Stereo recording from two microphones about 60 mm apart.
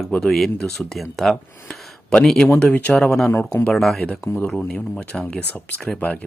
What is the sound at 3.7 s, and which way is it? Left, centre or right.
Speech, centre.